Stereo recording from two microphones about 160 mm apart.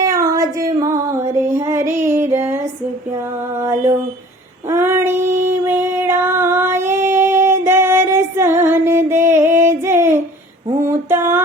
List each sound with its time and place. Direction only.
0.0 s female singing: 20° right (ahead or behind)
3.1 s music: 20° right (ahead or behind)
4.7 s female singing: 15° right (ahead or behind)
10.7 s a sound: 15° right (ahead or behind)